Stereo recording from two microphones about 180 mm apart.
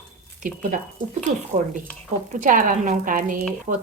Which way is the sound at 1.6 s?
40° right (ahead or behind).